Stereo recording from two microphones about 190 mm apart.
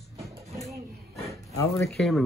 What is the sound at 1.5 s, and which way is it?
Speech, 15° left (ahead or behind).